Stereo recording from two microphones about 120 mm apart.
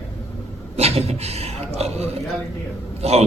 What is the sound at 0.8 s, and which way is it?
A man's voice, 60° right (ahead or behind).